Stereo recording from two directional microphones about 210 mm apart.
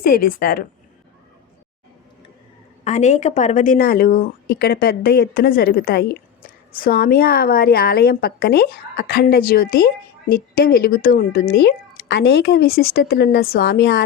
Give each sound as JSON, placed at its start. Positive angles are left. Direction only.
{"t": 0.0, "sound": "a woman's voice", "side_deg": 45}
{"t": 2.8, "sound": "a woman's voice", "side_deg": 35}